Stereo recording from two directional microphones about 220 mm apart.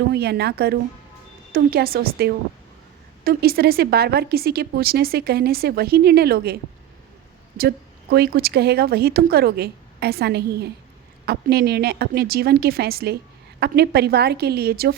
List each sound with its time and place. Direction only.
0.1 s a woman's voice: 50° right (ahead or behind)
8.1 s a woman's voice: 45° right (ahead or behind)